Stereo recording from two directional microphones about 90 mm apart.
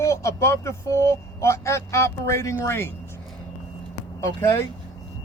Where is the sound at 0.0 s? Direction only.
35° left (ahead or behind).